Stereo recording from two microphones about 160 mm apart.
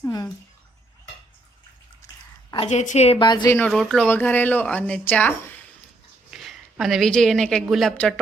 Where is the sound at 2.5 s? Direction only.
40° left (ahead or behind).